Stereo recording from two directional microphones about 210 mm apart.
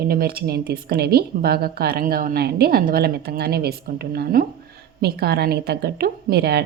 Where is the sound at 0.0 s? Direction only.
45° right (ahead or behind).